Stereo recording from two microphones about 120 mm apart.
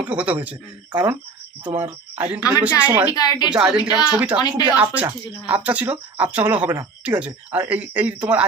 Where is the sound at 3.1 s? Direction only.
30° left (ahead or behind).